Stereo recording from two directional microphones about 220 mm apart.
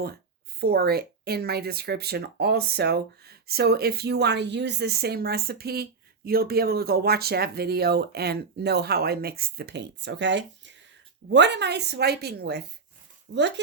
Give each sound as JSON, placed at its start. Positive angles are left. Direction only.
{"t": 0.6, "sound": "speech", "side_deg": -45}